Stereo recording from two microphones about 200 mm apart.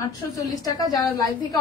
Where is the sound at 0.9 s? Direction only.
15° left (ahead or behind).